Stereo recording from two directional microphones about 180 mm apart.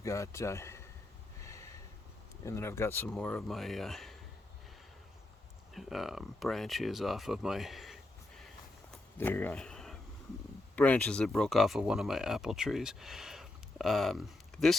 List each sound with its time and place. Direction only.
0.0 s speech: 15° left (ahead or behind)
1.4 s a sound: 15° left (ahead or behind)
2.4 s speech: 15° left (ahead or behind)
5.7 s speech: centre (ahead or behind)
8.9 s a sound: 10° left (ahead or behind)
10.8 s speech: 10° left (ahead or behind)